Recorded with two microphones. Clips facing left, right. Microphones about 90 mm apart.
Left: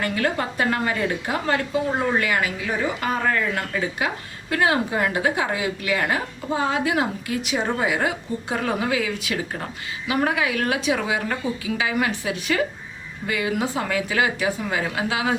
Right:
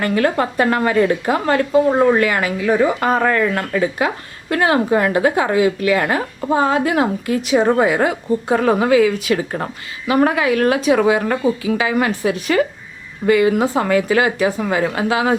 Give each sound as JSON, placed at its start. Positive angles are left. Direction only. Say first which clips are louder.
{"t": 0.0, "sound": "a woman's voice", "louder": "right 7 dB", "side_deg": -50}